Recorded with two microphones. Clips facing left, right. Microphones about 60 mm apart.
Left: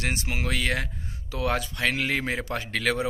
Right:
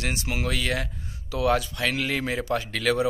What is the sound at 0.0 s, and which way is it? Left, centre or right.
Speech, left.